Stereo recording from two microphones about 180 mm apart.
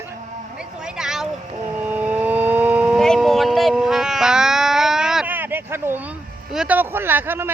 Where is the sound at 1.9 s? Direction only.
10° right (ahead or behind).